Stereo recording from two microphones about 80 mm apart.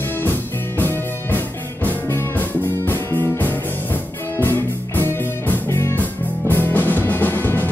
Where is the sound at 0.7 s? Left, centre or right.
Left.